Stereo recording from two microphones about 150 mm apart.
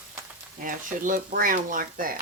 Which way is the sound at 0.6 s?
60° right (ahead or behind).